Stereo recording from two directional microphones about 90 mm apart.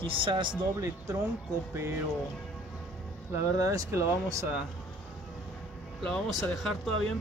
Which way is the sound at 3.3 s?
40° right (ahead or behind).